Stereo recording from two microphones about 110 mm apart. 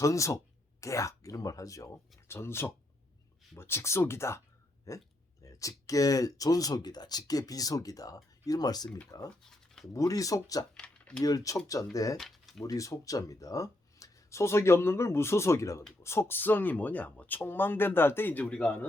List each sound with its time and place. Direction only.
0.0 s speech: 30° left (ahead or behind)
9.4 s a sound: 5° left (ahead or behind)
9.9 s speech: 30° left (ahead or behind)
10.8 s a sound: 10° left (ahead or behind)
11.2 s speech: 35° left (ahead or behind)
12.1 s speech: centre (ahead or behind)
12.6 s speech: 30° left (ahead or behind); by 18.9 s 10° left (ahead or behind)